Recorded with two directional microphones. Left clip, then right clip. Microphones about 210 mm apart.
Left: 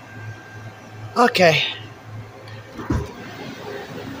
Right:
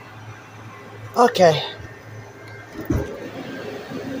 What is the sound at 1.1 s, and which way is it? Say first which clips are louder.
Speech: even; 15° left (ahead or behind).